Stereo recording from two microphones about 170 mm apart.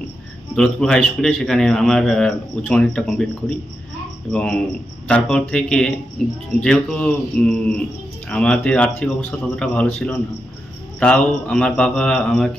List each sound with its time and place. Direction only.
0.6 s a man's voice: 5° left (ahead or behind)